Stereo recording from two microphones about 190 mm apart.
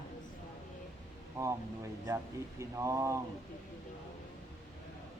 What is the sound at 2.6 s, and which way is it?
Speech, 15° right (ahead or behind).